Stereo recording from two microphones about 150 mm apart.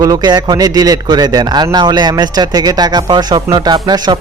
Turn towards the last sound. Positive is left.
turn(degrees=-30)  # may be behind; listen again after turning